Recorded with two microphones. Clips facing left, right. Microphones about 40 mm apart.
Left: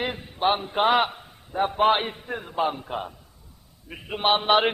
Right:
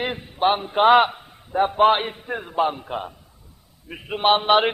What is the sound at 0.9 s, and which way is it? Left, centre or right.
A man's voice, centre.